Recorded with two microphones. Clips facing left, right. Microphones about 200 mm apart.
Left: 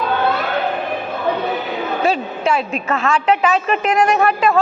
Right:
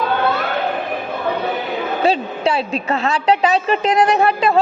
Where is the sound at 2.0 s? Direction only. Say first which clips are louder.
Right 1 dB; 35° right (ahead or behind).